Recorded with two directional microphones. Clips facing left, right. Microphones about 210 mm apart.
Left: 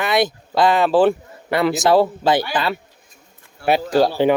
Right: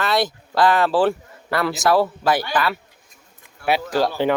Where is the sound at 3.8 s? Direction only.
30° left (ahead or behind).